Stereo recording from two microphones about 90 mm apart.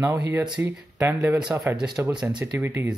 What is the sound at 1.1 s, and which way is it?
Speech, 40° right (ahead or behind).